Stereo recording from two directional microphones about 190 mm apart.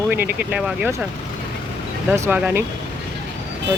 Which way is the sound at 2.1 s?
15° right (ahead or behind).